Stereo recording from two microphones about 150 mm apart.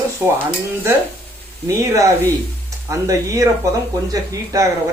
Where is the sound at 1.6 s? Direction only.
20° right (ahead or behind).